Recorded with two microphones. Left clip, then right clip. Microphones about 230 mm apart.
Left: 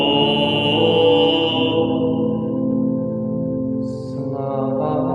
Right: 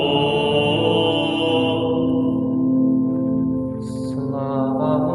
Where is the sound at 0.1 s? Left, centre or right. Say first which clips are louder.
Left 1 dB; left.